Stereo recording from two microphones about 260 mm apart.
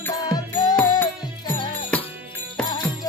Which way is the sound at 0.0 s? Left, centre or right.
Centre.